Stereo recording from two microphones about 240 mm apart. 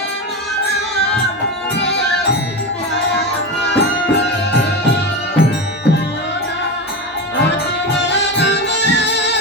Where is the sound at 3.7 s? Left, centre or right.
Left.